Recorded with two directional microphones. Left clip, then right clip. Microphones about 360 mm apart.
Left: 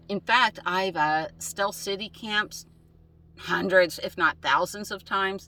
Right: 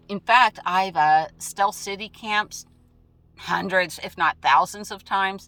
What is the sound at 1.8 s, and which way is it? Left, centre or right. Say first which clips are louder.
Speech: even; centre.